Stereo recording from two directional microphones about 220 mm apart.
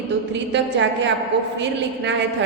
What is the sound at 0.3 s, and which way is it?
A woman's voice, 55° right (ahead or behind).